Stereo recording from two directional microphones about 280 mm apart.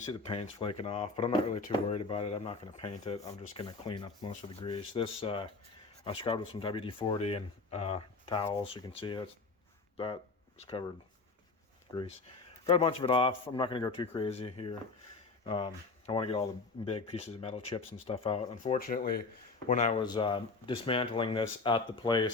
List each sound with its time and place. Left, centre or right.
0.1 s speech: centre
10.6 s speech: left
12.6 s speech: centre